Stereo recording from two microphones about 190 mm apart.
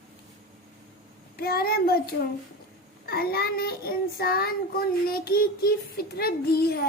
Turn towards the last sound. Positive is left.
turn(degrees=55)  # may be behind; listen again after turning